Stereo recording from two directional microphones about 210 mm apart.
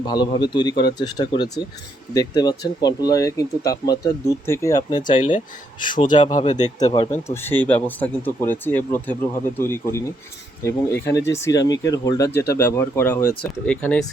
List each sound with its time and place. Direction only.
0.0 s speech: 20° left (ahead or behind)
5.9 s speech: 35° left (ahead or behind)
7.1 s speech: 10° left (ahead or behind)